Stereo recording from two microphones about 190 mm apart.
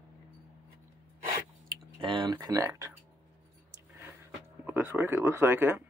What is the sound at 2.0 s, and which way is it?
Speech, 25° right (ahead or behind).